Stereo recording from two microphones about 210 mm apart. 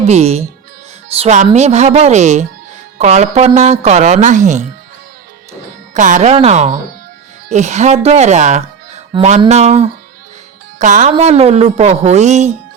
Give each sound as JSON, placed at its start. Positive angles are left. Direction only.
{"t": 0.0, "sound": "a woman's voice", "side_deg": -30}
{"t": 5.9, "sound": "a woman's voice", "side_deg": -35}